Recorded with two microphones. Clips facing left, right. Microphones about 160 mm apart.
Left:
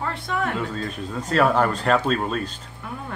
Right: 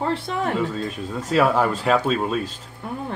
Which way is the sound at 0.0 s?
30° right (ahead or behind).